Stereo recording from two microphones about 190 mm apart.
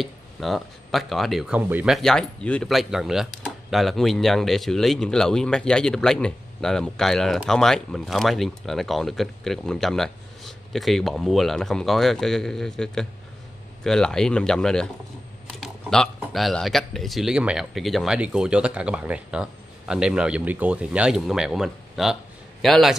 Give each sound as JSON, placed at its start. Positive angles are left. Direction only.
{"t": 0.0, "sound": "speech", "side_deg": 0}
{"t": 2.0, "sound": "speech", "side_deg": 5}
{"t": 15.6, "sound": "a sound", "side_deg": 5}
{"t": 16.2, "sound": "speech", "side_deg": 0}